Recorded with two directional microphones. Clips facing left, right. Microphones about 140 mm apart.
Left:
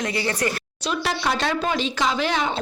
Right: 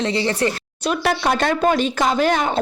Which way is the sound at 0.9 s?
50° right (ahead or behind).